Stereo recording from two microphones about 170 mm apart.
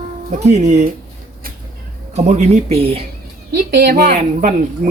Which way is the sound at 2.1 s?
40° right (ahead or behind).